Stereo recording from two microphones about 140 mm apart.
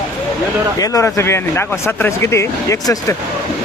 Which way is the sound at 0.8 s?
25° left (ahead or behind).